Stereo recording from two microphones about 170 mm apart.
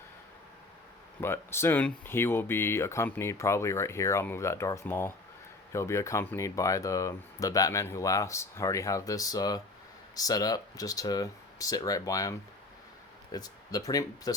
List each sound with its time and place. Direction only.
1.2 s speech: 15° left (ahead or behind)